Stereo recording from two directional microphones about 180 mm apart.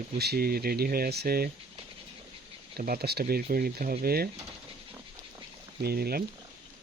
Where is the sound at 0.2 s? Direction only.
60° right (ahead or behind).